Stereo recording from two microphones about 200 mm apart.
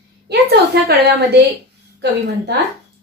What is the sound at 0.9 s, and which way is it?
A woman's voice, 55° right (ahead or behind).